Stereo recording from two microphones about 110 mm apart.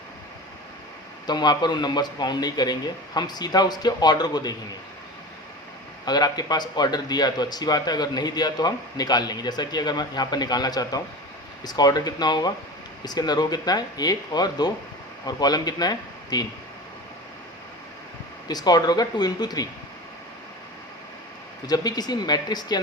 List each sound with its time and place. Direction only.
1.3 s a man's voice: 40° left (ahead or behind)
6.1 s a man's voice: 40° left (ahead or behind)
18.4 s a man's voice: 40° left (ahead or behind)
21.7 s a man's voice: 35° left (ahead or behind)